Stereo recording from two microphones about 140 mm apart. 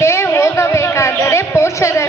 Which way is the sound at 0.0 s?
20° left (ahead or behind).